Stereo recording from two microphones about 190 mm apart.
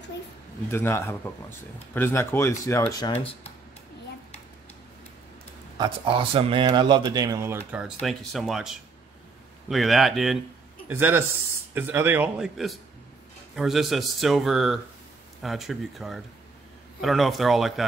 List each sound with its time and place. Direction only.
0.7 s speech: 15° left (ahead or behind)
5.8 s speech: 25° right (ahead or behind); by 12.4 s 10° right (ahead or behind)
13.6 s speech: centre (ahead or behind)